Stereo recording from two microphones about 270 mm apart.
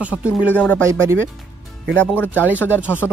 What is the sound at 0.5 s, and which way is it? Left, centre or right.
Speech, centre.